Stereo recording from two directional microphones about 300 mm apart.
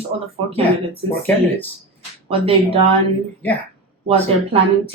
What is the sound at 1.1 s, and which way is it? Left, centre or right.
Speech, centre.